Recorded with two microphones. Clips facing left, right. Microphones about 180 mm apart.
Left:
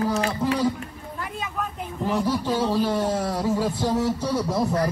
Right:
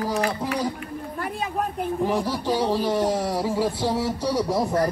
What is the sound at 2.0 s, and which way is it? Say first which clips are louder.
A man's voice: left 2 dB; 10° right (ahead or behind).